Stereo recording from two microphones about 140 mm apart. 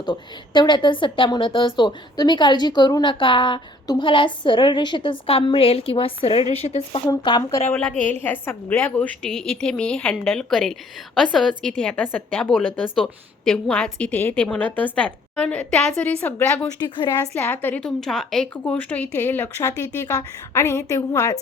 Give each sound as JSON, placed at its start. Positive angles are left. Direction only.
{"t": 0.0, "sound": "a woman's voice", "side_deg": 35}
{"t": 7.1, "sound": "a woman's voice", "side_deg": 30}
{"t": 7.8, "sound": "a woman's voice", "side_deg": 10}
{"t": 16.9, "sound": "a woman's voice", "side_deg": 35}
{"t": 17.3, "sound": "a woman's voice", "side_deg": 15}